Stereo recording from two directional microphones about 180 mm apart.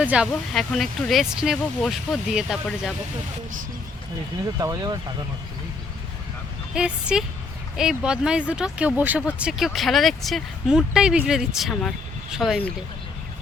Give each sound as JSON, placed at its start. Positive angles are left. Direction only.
{"t": 0.0, "sound": "speech", "side_deg": -5}
{"t": 4.6, "sound": "speech", "side_deg": -20}
{"t": 6.7, "sound": "speech", "side_deg": -5}